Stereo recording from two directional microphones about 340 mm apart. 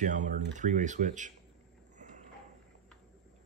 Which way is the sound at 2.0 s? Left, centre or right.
Right.